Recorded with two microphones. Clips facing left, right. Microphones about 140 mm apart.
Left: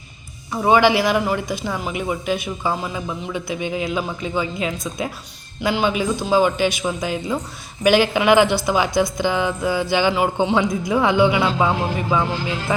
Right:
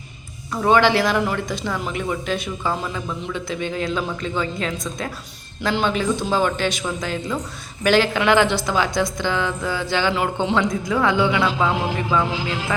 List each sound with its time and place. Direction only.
0.5 s speech: 10° left (ahead or behind)
11.7 s speech: centre (ahead or behind)